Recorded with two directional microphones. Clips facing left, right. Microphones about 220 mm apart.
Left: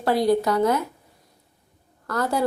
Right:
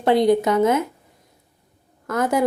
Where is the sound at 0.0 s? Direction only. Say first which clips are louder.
Right 4 dB; 20° right (ahead or behind).